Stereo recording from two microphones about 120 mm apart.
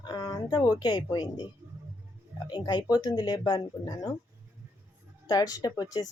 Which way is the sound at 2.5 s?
40° left (ahead or behind).